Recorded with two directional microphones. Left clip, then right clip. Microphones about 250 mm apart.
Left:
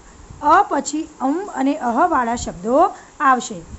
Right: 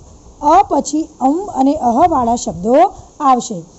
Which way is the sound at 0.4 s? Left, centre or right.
Centre.